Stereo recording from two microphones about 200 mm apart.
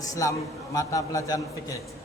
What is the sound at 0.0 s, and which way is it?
A man's voice, 15° left (ahead or behind).